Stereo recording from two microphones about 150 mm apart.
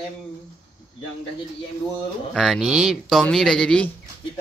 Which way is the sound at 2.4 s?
Centre (ahead or behind).